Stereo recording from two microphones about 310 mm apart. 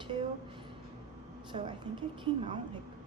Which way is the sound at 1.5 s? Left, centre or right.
Centre.